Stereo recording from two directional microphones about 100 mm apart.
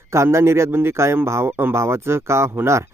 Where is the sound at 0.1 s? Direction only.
30° right (ahead or behind).